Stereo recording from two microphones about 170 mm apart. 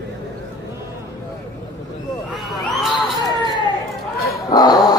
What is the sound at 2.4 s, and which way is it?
Crowd, centre (ahead or behind).